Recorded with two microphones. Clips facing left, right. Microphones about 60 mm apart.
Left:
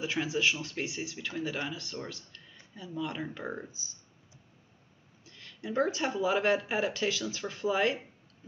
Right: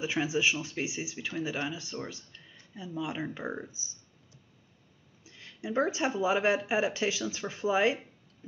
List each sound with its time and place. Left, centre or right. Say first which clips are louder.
0.0 s speech: right 1 dB; centre
5.2 s speech: right 2 dB; centre